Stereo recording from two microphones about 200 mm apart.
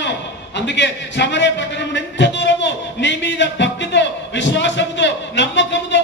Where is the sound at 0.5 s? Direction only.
60° left (ahead or behind).